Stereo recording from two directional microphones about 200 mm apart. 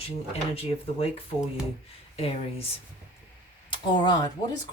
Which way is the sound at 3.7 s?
20° left (ahead or behind).